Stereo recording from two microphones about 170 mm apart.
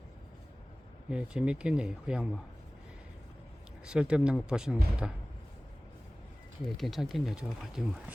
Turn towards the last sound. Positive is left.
turn(degrees=-5)  # may be behind; listen again after turning